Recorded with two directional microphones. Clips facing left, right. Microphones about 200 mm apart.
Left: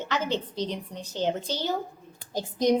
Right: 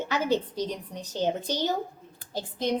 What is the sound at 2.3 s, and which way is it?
Speech, 15° left (ahead or behind).